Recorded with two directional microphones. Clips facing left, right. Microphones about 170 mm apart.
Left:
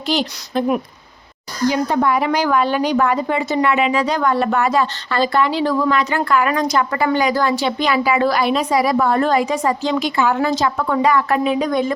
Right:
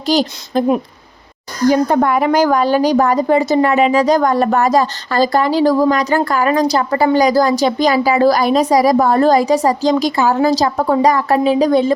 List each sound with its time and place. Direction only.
0.0 s a woman's voice: 40° right (ahead or behind)